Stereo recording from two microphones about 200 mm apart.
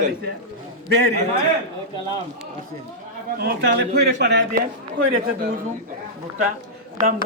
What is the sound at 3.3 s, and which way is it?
A man's voice, 50° right (ahead or behind).